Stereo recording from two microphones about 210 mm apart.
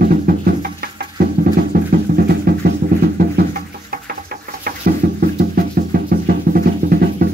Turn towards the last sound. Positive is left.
turn(degrees=-45)  # may be behind; listen again after turning